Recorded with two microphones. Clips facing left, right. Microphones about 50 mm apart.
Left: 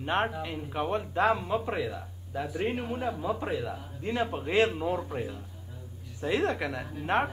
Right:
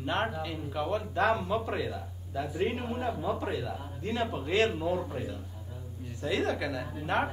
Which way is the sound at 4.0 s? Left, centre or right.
Left.